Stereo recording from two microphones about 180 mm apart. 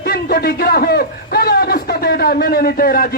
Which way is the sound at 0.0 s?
55° left (ahead or behind).